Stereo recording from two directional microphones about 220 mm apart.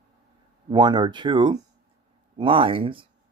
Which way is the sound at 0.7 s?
20° right (ahead or behind).